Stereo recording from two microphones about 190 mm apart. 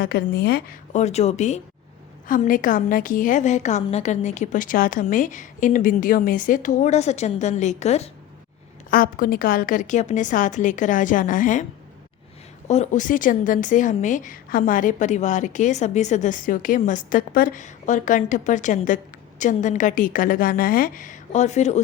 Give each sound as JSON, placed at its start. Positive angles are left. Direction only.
{"t": 0.0, "sound": "a woman's voice", "side_deg": 55}
{"t": 0.9, "sound": "a woman's voice", "side_deg": 35}
{"t": 8.9, "sound": "a woman's voice", "side_deg": 50}
{"t": 12.6, "sound": "a woman's voice", "side_deg": 35}